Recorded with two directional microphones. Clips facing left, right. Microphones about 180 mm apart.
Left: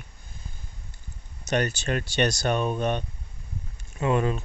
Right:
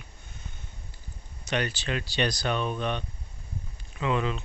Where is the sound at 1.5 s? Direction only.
45° left (ahead or behind).